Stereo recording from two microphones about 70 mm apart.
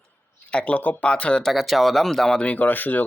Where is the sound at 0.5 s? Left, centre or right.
Centre.